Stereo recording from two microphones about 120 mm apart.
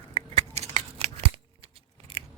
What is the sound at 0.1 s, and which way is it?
Scissors, 60° right (ahead or behind).